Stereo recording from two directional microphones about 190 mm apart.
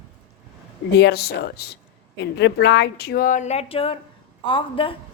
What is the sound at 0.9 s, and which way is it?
Speech, 60° left (ahead or behind).